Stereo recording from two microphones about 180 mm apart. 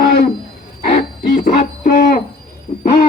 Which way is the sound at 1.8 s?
50° left (ahead or behind).